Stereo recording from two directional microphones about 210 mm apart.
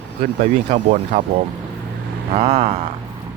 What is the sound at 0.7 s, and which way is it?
Speech, 35° right (ahead or behind).